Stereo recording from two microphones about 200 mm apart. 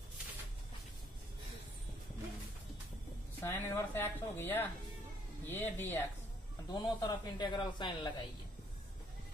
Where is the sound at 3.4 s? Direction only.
10° left (ahead or behind).